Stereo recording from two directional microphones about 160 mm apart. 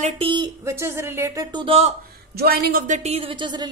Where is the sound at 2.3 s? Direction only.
80° right; by 3.7 s 30° right (ahead or behind).